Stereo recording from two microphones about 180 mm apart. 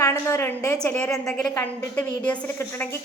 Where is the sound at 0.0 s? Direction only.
15° left (ahead or behind).